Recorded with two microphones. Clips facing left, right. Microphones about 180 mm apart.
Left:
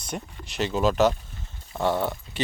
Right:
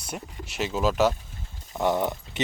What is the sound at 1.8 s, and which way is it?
Speech, 20° right (ahead or behind).